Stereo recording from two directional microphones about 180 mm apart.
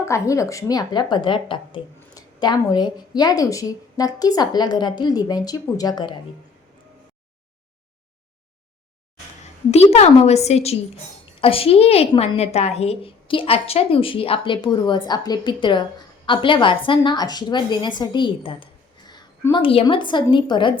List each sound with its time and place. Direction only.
0.0 s a woman's voice: 15° left (ahead or behind)
9.7 s a woman's voice: 35° left (ahead or behind)